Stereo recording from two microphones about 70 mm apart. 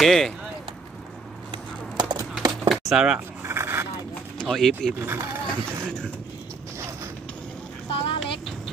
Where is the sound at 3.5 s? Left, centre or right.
Right.